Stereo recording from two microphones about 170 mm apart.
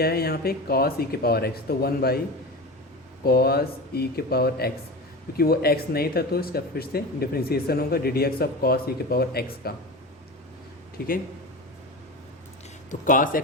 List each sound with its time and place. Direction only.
0.0 s speech: 65° left (ahead or behind)
3.2 s speech: 65° left (ahead or behind)
10.9 s speech: 60° left (ahead or behind)
12.9 s speech: 50° left (ahead or behind)